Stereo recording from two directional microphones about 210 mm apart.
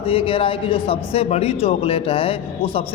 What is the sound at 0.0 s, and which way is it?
A man's voice, 25° left (ahead or behind).